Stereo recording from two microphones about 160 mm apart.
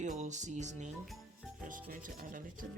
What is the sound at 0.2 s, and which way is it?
Music, 50° right (ahead or behind).